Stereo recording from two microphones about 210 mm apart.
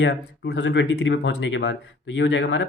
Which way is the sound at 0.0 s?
55° left (ahead or behind).